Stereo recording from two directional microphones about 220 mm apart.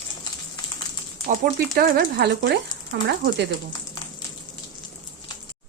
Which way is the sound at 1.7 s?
40° right (ahead or behind).